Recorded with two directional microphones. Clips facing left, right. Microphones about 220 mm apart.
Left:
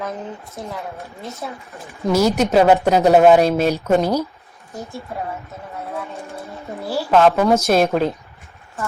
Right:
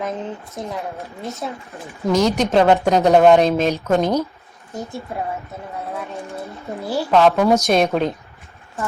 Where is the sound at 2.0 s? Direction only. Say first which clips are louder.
Left 1 dB; 5° left (ahead or behind).